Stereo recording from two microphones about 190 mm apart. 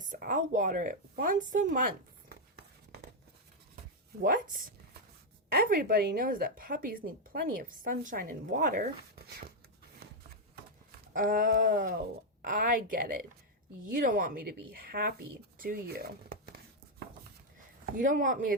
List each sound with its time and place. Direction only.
0.0 s speech: 45° right (ahead or behind)
4.2 s speech: 45° right (ahead or behind)
11.1 s speech: 45° right (ahead or behind)
17.9 s speech: 45° right (ahead or behind)